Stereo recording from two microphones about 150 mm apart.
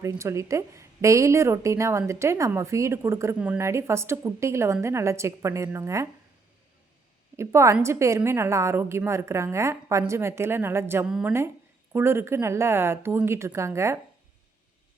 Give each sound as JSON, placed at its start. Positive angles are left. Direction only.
{"t": 0.0, "sound": "a woman's voice", "side_deg": -20}
{"t": 7.3, "sound": "a woman's voice", "side_deg": -20}